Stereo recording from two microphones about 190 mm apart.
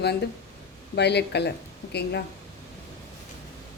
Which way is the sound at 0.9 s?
60° left (ahead or behind).